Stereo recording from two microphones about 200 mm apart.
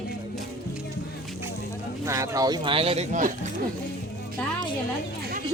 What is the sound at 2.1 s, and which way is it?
Speech, 15° right (ahead or behind).